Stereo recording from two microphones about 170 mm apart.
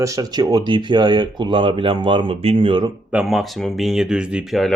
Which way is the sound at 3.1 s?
Centre (ahead or behind).